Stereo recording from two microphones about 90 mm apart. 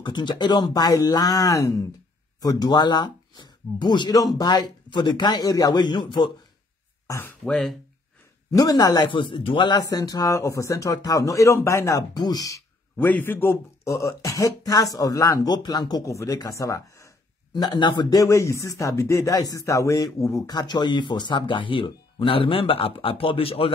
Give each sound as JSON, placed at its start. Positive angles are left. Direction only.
{"t": 0.0, "sound": "speech", "side_deg": 55}
{"t": 2.4, "sound": "speech", "side_deg": 50}
{"t": 7.4, "sound": "speech", "side_deg": 5}
{"t": 8.5, "sound": "speech", "side_deg": 45}
{"t": 9.1, "sound": "a man's voice", "side_deg": 70}
{"t": 9.8, "sound": "speech", "side_deg": 45}
{"t": 12.2, "sound": "speech", "side_deg": 45}
{"t": 12.9, "sound": "a man's voice", "side_deg": 20}
{"t": 15.5, "sound": "speech", "side_deg": 50}
{"t": 16.1, "sound": "speech", "side_deg": 35}
{"t": 17.6, "sound": "speech", "side_deg": 55}
{"t": 18.1, "sound": "speech", "side_deg": 35}